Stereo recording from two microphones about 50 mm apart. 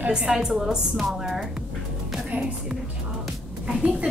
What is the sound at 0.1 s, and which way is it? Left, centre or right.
A woman's voice, centre.